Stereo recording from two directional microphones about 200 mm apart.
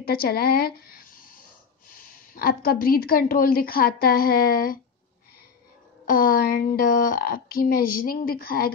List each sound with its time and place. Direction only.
0.0 s a woman's voice: 50° left (ahead or behind)
6.0 s a woman's voice: 45° left (ahead or behind)